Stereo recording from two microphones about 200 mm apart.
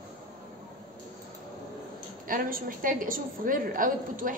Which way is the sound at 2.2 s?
45° right (ahead or behind).